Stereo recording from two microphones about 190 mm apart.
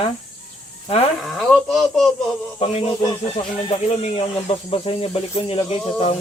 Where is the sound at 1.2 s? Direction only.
Centre (ahead or behind).